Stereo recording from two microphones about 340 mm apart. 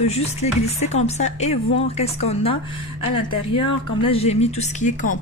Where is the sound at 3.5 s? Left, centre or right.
Centre.